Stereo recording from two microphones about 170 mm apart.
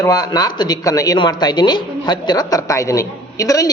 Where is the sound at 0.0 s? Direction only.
20° left (ahead or behind).